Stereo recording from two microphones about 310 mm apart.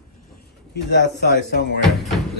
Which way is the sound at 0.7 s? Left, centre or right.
Left.